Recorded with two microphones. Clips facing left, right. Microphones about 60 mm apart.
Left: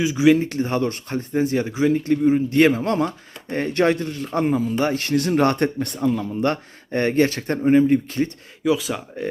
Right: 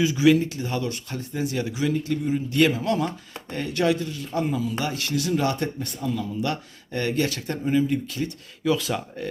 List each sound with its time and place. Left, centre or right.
0.0 s speech: left
0.4 s speech: left
8.6 s speech: centre